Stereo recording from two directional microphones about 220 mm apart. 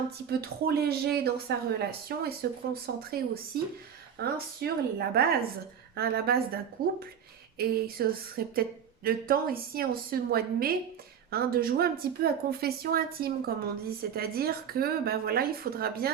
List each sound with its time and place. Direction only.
0.3 s speech: 45° right (ahead or behind)